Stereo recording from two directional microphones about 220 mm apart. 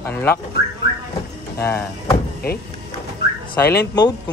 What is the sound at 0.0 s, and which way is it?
Speech, 10° left (ahead or behind).